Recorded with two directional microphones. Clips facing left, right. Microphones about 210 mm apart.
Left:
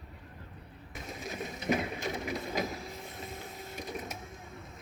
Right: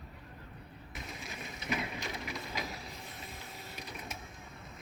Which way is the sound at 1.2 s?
45° left (ahead or behind).